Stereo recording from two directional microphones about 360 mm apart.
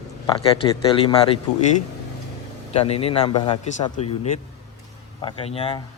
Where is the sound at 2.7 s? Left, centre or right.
Centre.